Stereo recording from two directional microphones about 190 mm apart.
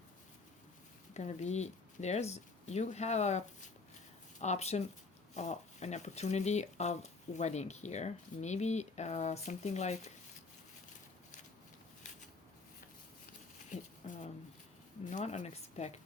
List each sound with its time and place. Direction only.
1.1 s speech: 35° left (ahead or behind)
13.7 s a sound: 40° left (ahead or behind)
15.1 s speech: 40° left (ahead or behind)